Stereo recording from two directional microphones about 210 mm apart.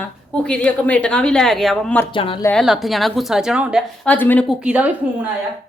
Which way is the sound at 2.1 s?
25° left (ahead or behind).